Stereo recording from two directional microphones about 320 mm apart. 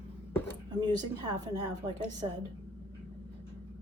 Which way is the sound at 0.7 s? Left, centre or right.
Centre.